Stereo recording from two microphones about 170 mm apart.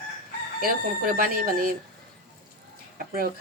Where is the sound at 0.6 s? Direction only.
55° right (ahead or behind).